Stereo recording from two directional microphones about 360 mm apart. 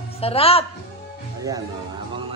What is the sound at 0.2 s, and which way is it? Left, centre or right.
Speech, centre.